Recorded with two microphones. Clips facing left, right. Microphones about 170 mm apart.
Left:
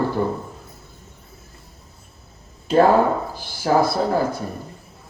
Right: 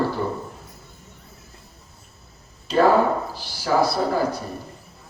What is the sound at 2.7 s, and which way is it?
Speech, 50° left (ahead or behind).